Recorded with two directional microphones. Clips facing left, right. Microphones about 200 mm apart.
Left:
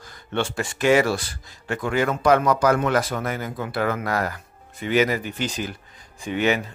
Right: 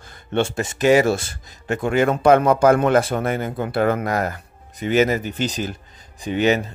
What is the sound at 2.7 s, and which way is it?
Speech, 50° right (ahead or behind).